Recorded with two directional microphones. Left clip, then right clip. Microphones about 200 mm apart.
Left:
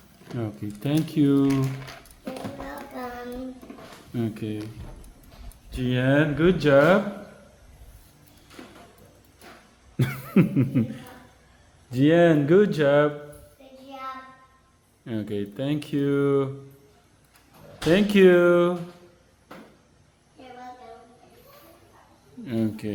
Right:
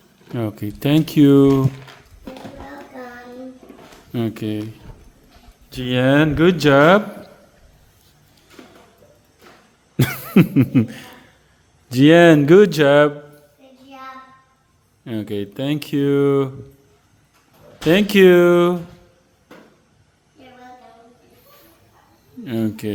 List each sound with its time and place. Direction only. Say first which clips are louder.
0.3 s speech: right 8 dB; 55° right (ahead or behind)
1.9 s music: even; 15° left (ahead or behind)
4.1 s speech: right 7 dB; 55° right (ahead or behind)
5.7 s speech: right 6 dB; 55° right (ahead or behind)
10.0 s cough: right 7 dB; 45° right (ahead or behind)
11.9 s speech: right 8 dB; 50° right (ahead or behind)
15.0 s speech: right 5 dB; 35° right (ahead or behind)
17.8 s speech: right 5 dB; 40° right (ahead or behind)
22.4 s speech: right 5 dB; 45° right (ahead or behind)